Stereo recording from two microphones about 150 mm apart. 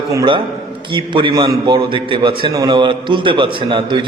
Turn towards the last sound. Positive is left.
turn(degrees=-35)  # may be behind; listen again after turning